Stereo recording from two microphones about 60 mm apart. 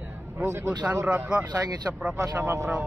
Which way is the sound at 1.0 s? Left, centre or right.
Right.